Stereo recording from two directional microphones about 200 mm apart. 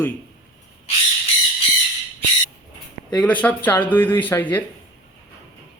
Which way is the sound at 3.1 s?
5° left (ahead or behind).